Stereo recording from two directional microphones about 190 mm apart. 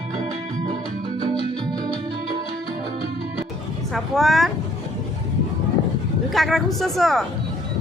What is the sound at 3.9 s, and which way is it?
Speech, centre (ahead or behind).